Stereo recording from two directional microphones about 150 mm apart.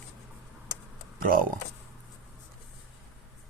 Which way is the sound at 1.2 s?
70° right (ahead or behind).